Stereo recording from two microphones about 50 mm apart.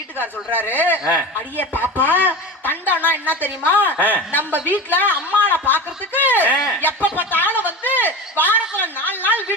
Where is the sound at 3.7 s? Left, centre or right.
Right.